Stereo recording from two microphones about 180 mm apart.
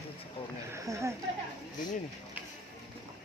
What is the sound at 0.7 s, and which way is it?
Speech, 15° right (ahead or behind).